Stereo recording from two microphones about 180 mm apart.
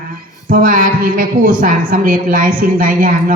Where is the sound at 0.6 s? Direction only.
50° right (ahead or behind).